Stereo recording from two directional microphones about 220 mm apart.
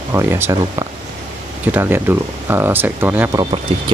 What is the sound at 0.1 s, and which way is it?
Speech, 10° right (ahead or behind).